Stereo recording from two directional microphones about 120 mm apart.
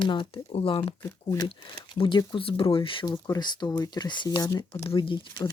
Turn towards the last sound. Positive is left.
turn(degrees=40)  # may be behind; listen again after turning